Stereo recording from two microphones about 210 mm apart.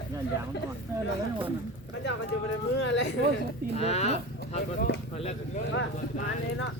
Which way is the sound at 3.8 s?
30° left (ahead or behind).